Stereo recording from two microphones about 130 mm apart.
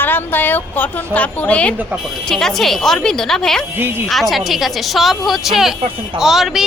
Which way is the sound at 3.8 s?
15° right (ahead or behind).